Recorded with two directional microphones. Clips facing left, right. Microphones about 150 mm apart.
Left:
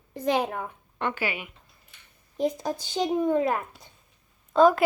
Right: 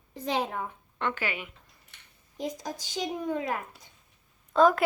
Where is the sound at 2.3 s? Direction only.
55° left (ahead or behind).